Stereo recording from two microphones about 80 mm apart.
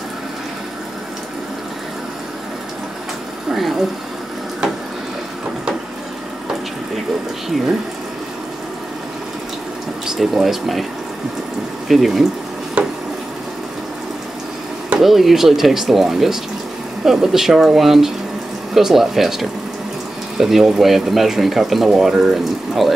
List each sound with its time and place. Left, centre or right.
3.5 s speech: centre
10.0 s speech: centre
11.9 s speech: centre
12.8 s a sound: centre
15.0 s speech: centre